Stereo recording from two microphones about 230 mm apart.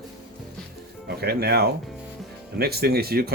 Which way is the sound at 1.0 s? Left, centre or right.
Right.